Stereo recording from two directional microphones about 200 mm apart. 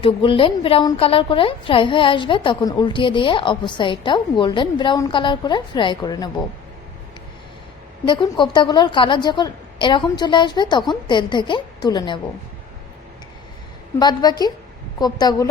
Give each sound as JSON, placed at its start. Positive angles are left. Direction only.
{"t": 0.0, "sound": "a woman's voice", "side_deg": 25}
{"t": 8.0, "sound": "a woman's voice", "side_deg": 25}
{"t": 14.0, "sound": "a woman's voice", "side_deg": 20}